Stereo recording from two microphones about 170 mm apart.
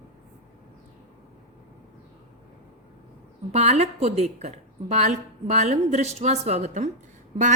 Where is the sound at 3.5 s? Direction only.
40° right (ahead or behind).